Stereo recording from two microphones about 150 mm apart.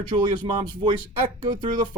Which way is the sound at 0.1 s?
30° right (ahead or behind).